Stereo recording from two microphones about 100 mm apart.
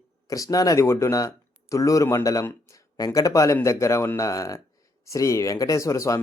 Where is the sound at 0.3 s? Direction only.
35° left (ahead or behind).